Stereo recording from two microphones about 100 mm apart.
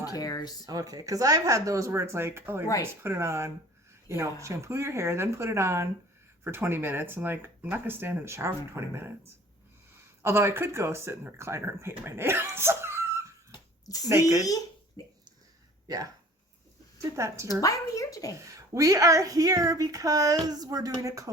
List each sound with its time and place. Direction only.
0.0 s speech: 40° left (ahead or behind)
0.6 s speech: 40° right (ahead or behind)
13.5 s a sound: 40° left (ahead or behind)
14.1 s speech: 30° right (ahead or behind)
15.0 s speech: 40° left (ahead or behind)
15.9 s speech: 40° right (ahead or behind)
17.2 s speech: 30° right (ahead or behind)
17.6 s speech: 35° left (ahead or behind)
18.3 s speech: 30° right (ahead or behind)